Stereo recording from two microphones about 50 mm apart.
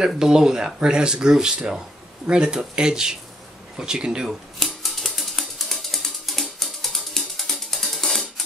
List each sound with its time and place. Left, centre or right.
0.2 s speech: centre
4.6 s mechanisms: centre